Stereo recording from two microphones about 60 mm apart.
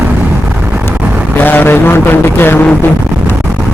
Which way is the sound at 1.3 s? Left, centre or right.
Left.